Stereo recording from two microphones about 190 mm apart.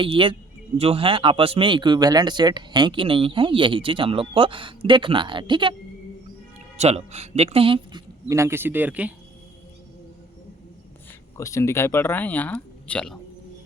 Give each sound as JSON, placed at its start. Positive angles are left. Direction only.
{"t": 0.0, "sound": "speech", "side_deg": -25}
{"t": 6.7, "sound": "speech", "side_deg": -35}
{"t": 8.3, "sound": "speech", "side_deg": -15}
{"t": 11.3, "sound": "speech", "side_deg": 15}